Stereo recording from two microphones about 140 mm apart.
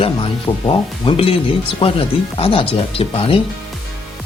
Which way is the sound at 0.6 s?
40° left (ahead or behind).